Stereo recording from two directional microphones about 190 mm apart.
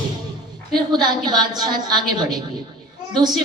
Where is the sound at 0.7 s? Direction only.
20° right (ahead or behind).